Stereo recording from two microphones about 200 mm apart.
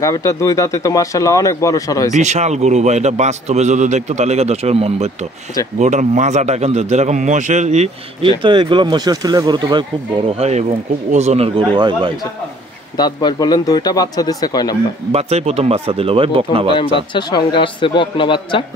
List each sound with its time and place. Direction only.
0.0 s speech: 15° left (ahead or behind)
2.1 s a man's voice: 35° right (ahead or behind)
12.9 s speech: 20° left (ahead or behind)
15.1 s speech: 30° right (ahead or behind)
17.1 s speech: 25° left (ahead or behind)